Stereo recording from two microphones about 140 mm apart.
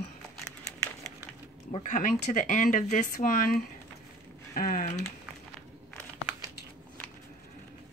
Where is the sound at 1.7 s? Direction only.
60° left (ahead or behind); by 4.9 s 90° left.